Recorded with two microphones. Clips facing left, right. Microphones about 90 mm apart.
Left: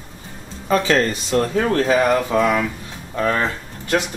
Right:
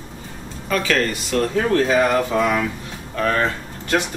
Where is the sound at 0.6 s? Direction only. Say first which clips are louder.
Left 3 dB; 30° left (ahead or behind).